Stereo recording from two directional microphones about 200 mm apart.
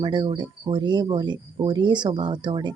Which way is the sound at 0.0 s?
25° right (ahead or behind).